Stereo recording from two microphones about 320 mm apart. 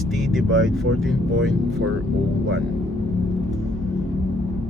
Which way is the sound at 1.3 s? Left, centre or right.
Right.